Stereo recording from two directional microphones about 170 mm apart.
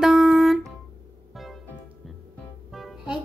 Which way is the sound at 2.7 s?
5° right (ahead or behind).